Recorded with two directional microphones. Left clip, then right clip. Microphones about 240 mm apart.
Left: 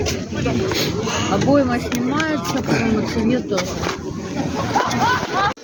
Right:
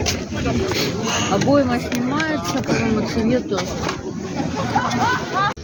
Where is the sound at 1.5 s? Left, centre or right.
Centre.